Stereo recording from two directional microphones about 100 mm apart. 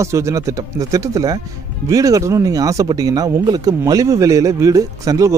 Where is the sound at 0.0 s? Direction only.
30° right (ahead or behind).